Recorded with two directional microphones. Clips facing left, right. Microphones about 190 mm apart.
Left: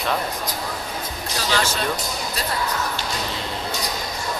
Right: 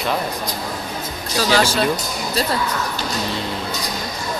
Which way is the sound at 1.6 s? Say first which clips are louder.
Right 6 dB; 30° right (ahead or behind).